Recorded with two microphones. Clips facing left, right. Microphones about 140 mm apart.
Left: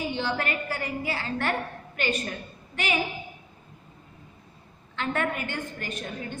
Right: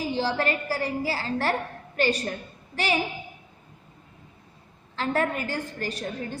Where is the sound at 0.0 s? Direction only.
35° right (ahead or behind).